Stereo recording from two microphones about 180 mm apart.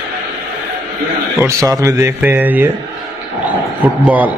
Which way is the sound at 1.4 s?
15° right (ahead or behind).